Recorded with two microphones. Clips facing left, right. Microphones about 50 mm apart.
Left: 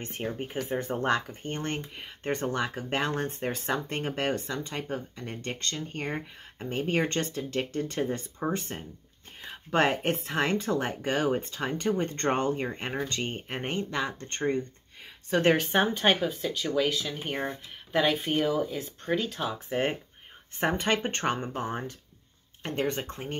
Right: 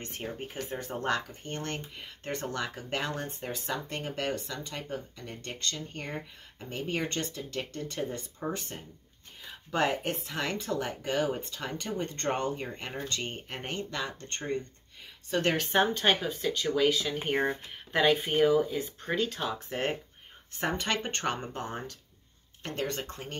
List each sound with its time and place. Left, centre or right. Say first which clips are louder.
0.0 s speech: left 4 dB; left
9.4 s speech: left 4 dB; left
15.4 s speech: left 2 dB; centre
20.6 s speech: left 4 dB; left